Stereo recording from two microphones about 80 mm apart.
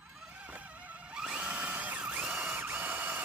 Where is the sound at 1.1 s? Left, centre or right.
Centre.